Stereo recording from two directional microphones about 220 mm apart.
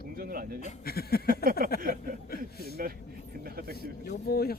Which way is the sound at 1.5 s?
40° right (ahead or behind).